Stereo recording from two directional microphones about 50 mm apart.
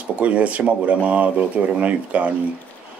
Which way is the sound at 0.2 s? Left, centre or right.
Right.